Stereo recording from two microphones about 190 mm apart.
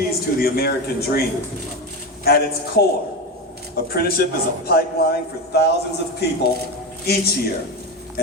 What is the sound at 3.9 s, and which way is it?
A man's voice, 55° left (ahead or behind).